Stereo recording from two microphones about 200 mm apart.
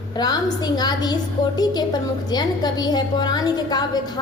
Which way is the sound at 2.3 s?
20° left (ahead or behind).